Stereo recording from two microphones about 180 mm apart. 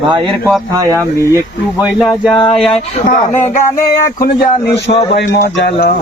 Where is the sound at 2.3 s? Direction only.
25° left (ahead or behind).